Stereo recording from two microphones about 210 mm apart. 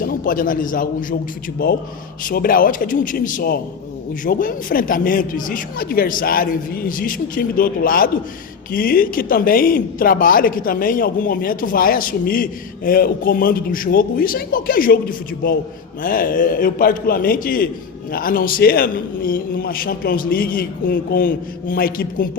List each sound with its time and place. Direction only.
0.0 s a man's voice: 45° left (ahead or behind)
2.2 s speech: 45° left (ahead or behind)
16.0 s speech: 40° left (ahead or behind)